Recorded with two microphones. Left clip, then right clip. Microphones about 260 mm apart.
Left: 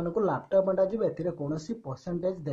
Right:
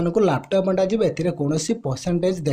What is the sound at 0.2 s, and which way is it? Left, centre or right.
Speech, right.